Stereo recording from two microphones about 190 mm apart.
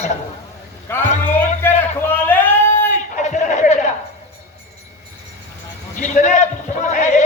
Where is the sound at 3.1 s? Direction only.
40° left (ahead or behind).